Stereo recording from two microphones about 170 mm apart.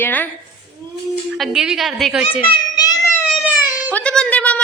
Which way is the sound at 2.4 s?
25° left (ahead or behind).